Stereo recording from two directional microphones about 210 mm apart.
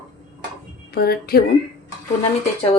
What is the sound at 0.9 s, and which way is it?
Speech, 45° left (ahead or behind).